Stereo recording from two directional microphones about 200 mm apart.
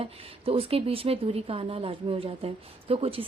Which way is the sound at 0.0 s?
30° right (ahead or behind).